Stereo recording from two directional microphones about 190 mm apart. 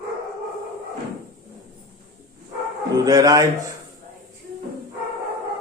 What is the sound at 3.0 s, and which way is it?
Speech, 20° right (ahead or behind).